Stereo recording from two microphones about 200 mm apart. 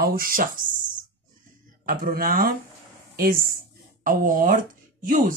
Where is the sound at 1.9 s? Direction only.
45° right (ahead or behind).